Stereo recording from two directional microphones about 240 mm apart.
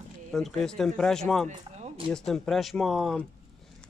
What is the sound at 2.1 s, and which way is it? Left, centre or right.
Speech, centre.